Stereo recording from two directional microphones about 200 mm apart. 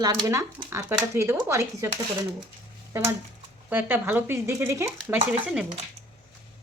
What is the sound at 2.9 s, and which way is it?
A woman's voice, 15° right (ahead or behind).